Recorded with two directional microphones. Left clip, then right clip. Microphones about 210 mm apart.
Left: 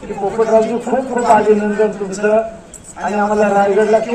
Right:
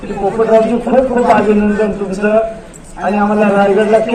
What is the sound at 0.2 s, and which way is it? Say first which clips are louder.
A man's voice: right 3 dB; 50° right (ahead or behind).